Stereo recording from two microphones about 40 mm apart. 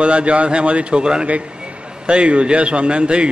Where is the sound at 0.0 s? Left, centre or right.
Right.